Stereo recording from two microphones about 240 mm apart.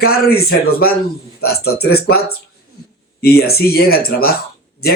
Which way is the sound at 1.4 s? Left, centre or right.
Left.